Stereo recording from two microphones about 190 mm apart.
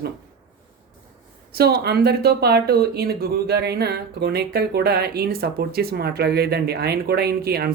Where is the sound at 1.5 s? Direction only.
55° right (ahead or behind).